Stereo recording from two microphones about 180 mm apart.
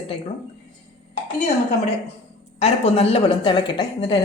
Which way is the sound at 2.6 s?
35° left (ahead or behind).